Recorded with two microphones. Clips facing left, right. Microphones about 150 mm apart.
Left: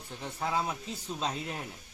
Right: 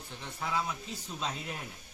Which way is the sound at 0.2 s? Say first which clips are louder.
Left 3 dB; 40° left (ahead or behind).